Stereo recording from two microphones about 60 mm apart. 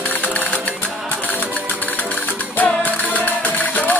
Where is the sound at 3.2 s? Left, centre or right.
Left.